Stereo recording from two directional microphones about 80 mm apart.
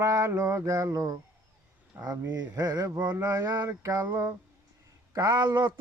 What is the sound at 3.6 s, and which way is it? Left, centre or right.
Mantra, right.